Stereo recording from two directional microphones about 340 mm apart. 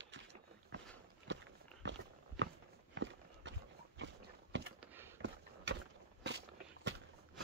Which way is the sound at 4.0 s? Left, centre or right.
Right.